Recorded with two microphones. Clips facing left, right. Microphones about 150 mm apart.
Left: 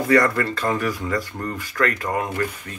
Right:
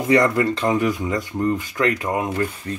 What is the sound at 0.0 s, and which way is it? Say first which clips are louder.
Speech: right 1 dB; 20° right (ahead or behind).